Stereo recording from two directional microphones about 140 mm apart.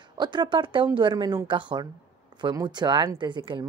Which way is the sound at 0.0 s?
30° right (ahead or behind).